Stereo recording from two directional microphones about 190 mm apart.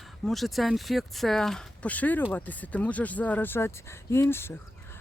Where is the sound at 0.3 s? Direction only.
Centre (ahead or behind).